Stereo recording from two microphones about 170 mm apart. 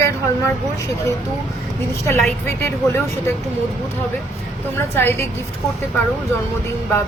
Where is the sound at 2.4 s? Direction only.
15° left (ahead or behind).